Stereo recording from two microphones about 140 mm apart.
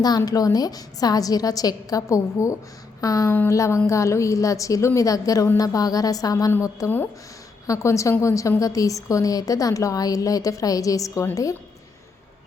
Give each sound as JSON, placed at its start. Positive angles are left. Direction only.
{"t": 0.0, "sound": "a woman's voice", "side_deg": 30}